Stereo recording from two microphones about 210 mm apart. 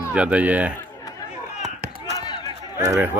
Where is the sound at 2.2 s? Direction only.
20° left (ahead or behind).